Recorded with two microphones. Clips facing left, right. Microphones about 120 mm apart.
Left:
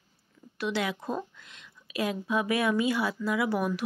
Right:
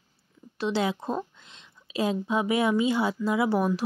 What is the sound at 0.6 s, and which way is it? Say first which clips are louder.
Speech: right 4 dB; 30° right (ahead or behind).